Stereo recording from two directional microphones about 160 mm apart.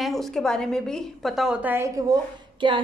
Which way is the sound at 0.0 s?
Centre (ahead or behind).